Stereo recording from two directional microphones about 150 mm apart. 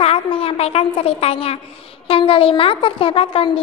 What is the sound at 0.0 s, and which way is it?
A woman's voice, 40° left (ahead or behind).